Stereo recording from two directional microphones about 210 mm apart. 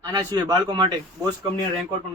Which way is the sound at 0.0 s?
20° right (ahead or behind).